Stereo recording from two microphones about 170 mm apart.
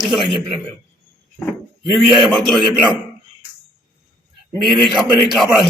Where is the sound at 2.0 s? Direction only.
Centre (ahead or behind).